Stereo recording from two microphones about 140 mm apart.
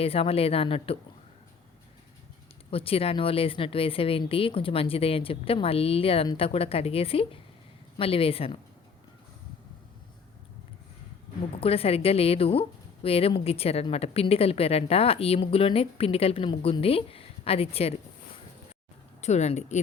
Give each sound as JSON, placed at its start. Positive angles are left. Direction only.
{"t": 0.0, "sound": "a woman's voice", "side_deg": 45}
{"t": 2.6, "sound": "a woman's voice", "side_deg": 40}
{"t": 11.5, "sound": "a woman's voice", "side_deg": 45}
{"t": 19.2, "sound": "speech", "side_deg": 55}